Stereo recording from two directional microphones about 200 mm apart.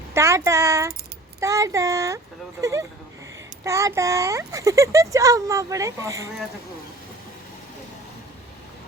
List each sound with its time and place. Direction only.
0.1 s a child's voice: 15° right (ahead or behind)